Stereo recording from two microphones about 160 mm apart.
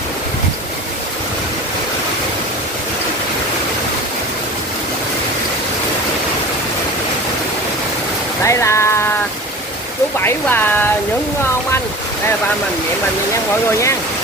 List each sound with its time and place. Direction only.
8.5 s speech: 15° left (ahead or behind)
10.2 s speech: 15° left (ahead or behind)